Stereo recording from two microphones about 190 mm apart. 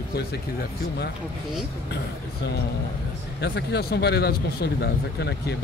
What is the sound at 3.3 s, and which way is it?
Speech, 60° left (ahead or behind).